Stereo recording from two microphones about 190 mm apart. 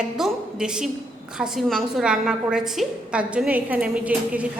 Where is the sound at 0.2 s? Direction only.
5° right (ahead or behind).